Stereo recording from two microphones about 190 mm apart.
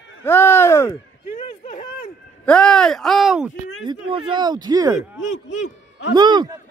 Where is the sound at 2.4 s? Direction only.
5° left (ahead or behind).